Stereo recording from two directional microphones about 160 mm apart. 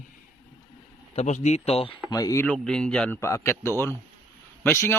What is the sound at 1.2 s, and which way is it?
Speech, 45° left (ahead or behind).